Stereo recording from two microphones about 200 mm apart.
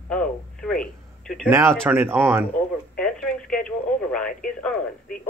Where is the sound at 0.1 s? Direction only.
5° left (ahead or behind).